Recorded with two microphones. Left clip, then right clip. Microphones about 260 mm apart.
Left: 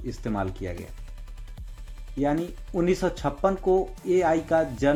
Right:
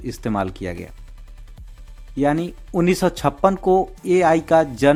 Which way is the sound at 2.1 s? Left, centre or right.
Right.